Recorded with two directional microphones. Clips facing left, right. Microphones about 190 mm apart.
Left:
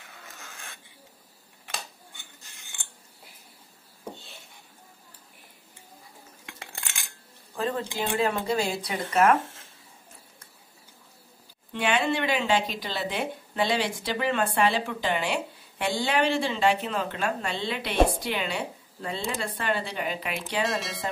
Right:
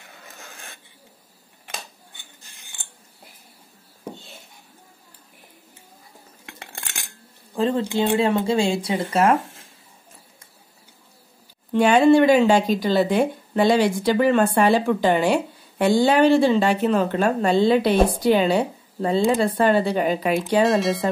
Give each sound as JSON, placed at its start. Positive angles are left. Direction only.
{"t": 6.4, "sound": "cutlery", "side_deg": -45}
{"t": 7.5, "sound": "speech", "side_deg": -30}
{"t": 11.7, "sound": "speech", "side_deg": -40}
{"t": 20.6, "sound": "speech", "side_deg": 0}